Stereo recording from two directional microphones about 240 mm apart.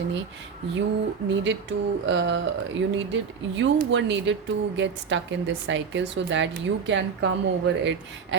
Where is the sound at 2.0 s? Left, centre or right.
Right.